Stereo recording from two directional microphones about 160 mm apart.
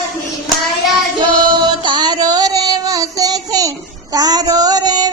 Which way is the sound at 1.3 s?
25° right (ahead or behind).